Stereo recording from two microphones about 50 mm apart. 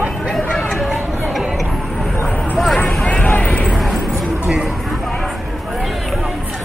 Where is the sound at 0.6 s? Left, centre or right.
Centre.